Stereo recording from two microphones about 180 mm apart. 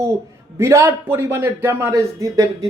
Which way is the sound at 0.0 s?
15° right (ahead or behind).